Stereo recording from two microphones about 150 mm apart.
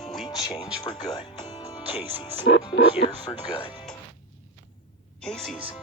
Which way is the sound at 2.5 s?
90° left.